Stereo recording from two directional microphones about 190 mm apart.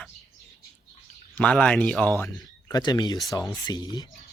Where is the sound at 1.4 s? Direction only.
5° left (ahead or behind).